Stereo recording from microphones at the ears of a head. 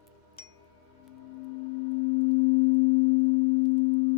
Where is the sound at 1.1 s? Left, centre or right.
Left.